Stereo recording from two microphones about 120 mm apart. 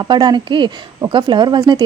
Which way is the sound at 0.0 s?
35° right (ahead or behind).